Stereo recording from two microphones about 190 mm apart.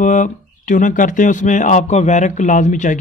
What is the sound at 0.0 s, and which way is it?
Speech, 40° left (ahead or behind).